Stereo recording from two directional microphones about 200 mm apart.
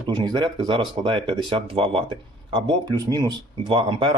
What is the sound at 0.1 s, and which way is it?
Speech, 20° right (ahead or behind).